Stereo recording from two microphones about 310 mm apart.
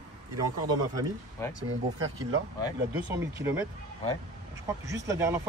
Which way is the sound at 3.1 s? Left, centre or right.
Centre.